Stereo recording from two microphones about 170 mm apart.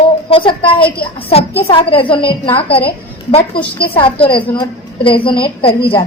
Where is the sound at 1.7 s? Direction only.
30° left (ahead or behind).